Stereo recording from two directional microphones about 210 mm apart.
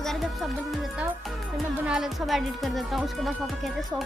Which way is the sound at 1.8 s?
Centre (ahead or behind).